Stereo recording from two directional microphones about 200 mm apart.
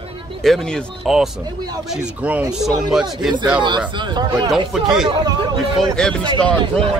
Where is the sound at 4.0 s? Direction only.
20° right (ahead or behind).